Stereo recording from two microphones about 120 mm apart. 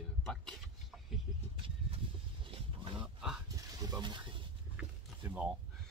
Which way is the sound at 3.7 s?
30° right (ahead or behind).